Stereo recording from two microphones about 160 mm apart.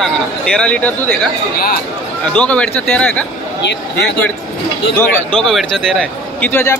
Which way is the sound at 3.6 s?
90° left.